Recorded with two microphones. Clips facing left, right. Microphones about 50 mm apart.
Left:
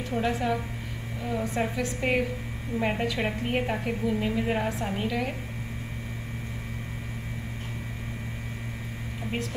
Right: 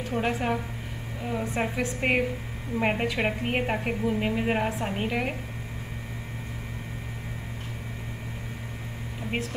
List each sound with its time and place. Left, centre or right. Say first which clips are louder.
0.2 s a woman's voice: even; right
1.2 s a woman's voice: even; right